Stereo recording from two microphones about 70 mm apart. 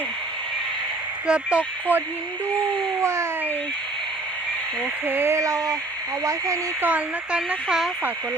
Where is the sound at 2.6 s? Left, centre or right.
Right.